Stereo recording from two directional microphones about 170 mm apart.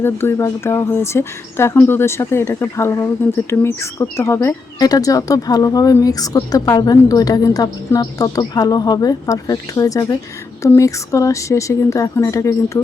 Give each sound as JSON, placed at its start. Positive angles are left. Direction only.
{"t": 0.0, "sound": "speech", "side_deg": 15}